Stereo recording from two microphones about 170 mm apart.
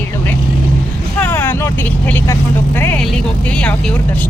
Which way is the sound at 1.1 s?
10° left (ahead or behind).